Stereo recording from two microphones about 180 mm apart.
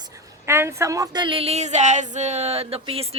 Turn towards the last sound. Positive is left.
turn(degrees=-30)  # may be behind; listen again after turning